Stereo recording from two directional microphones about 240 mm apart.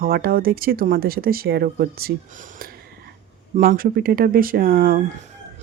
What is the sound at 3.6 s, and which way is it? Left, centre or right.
Speech, right.